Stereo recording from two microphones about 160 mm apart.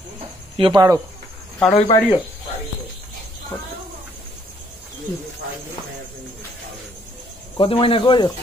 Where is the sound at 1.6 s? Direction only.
Centre (ahead or behind).